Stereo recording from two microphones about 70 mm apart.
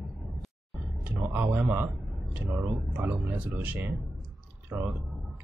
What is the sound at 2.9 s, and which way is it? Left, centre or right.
Speech, right.